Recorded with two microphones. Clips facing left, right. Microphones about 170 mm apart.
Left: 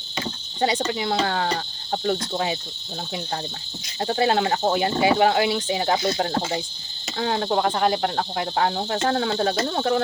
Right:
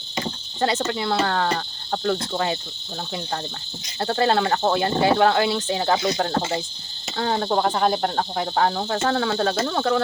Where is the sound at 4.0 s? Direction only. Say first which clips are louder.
Right 1 dB; 15° left (ahead or behind).